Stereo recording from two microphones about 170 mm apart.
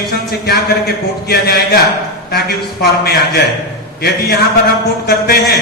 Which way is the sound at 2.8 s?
70° left (ahead or behind).